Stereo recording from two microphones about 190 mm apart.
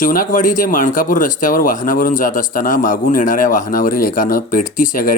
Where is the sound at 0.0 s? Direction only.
45° left (ahead or behind).